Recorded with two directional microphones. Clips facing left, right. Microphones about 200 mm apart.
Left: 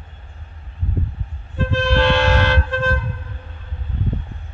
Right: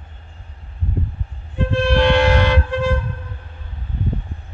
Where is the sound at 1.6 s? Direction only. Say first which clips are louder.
Right 2 dB; 15° right (ahead or behind).